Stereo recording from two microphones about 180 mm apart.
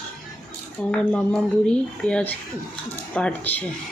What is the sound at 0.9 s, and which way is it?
Speech, 5° left (ahead or behind).